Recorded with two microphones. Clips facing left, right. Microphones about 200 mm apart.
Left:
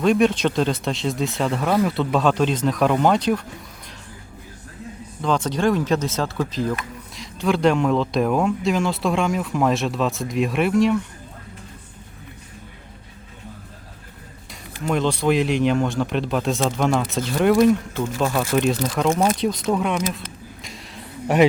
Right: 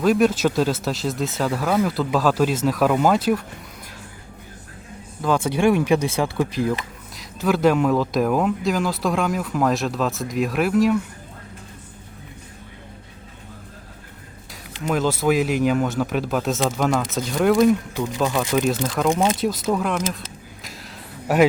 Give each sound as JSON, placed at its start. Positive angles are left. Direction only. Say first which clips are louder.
{"t": 0.0, "sound": "speech", "louder": "even", "side_deg": -5}
{"t": 5.2, "sound": "speech", "louder": "right 2 dB", "side_deg": -10}
{"t": 14.8, "sound": "speech", "louder": "even", "side_deg": -5}
{"t": 17.9, "sound": "speech", "louder": "even", "side_deg": -15}
{"t": 18.5, "sound": "speech", "louder": "left 1 dB", "side_deg": 0}
{"t": 20.7, "sound": "a sound", "louder": "right 1 dB", "side_deg": 0}